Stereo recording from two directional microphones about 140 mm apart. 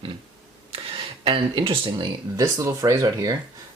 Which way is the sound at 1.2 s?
40° right (ahead or behind).